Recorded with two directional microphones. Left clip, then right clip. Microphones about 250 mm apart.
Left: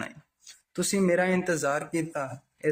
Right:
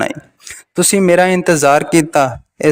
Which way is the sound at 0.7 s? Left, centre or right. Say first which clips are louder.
Right 14 dB; right.